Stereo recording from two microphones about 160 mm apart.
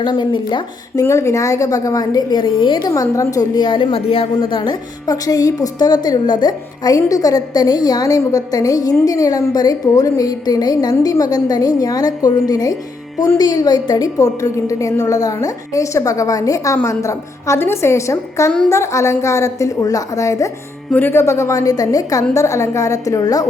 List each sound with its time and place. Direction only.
0.0 s a woman's voice: 30° left (ahead or behind)
1.0 s a woman's voice: 20° left (ahead or behind)